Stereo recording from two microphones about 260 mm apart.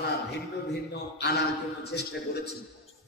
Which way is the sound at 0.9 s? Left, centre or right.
Left.